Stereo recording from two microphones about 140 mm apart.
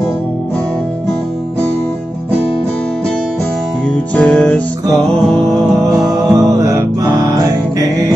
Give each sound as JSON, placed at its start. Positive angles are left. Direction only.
{"t": 4.1, "sound": "music", "side_deg": 5}
{"t": 5.9, "sound": "music", "side_deg": -25}